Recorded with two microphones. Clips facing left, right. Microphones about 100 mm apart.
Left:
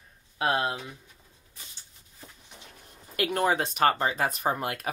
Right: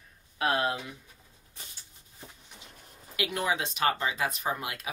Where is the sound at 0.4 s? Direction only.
30° left (ahead or behind).